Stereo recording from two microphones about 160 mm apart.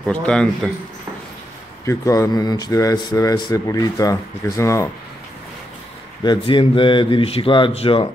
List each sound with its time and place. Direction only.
0.0 s a man's voice: 5° left (ahead or behind)
1.9 s speech: 20° left (ahead or behind)
6.2 s speech: 30° left (ahead or behind)